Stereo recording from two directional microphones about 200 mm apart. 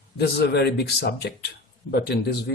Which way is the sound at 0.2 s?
55° left (ahead or behind).